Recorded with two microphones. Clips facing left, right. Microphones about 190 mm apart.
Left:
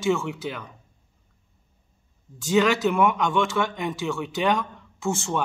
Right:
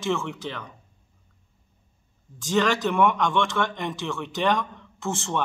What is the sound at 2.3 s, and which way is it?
Speech, 5° left (ahead or behind).